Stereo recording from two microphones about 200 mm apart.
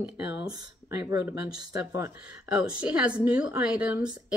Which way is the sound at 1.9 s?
10° right (ahead or behind).